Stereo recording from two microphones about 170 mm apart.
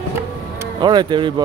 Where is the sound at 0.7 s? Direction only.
25° right (ahead or behind).